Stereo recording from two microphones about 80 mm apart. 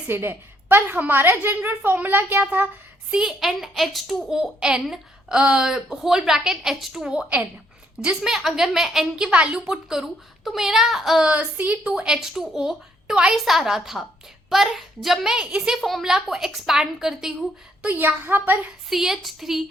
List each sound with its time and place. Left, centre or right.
0.1 s a child's voice: right
3.1 s a woman's voice: centre
17.8 s a child's voice: right
18.9 s a woman's voice: centre